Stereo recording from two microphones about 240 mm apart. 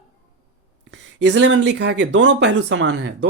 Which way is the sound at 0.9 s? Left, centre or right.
Right.